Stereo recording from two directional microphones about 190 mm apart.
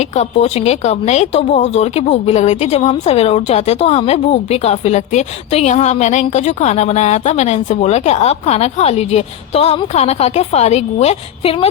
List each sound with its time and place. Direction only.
0.2 s speech: 35° left (ahead or behind)